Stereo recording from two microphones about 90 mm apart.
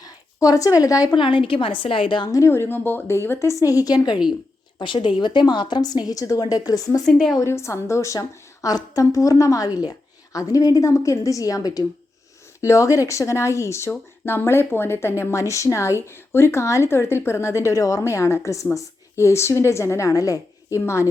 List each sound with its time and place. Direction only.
0.0 s a woman's voice: 40° left (ahead or behind)
1.1 s a woman's voice: 65° left (ahead or behind)
2.3 s a woman's voice: 30° left (ahead or behind)
7.0 s a woman's voice: centre (ahead or behind)
7.4 s speech: 30° left (ahead or behind)